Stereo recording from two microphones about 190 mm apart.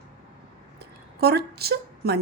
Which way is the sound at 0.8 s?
55° right (ahead or behind).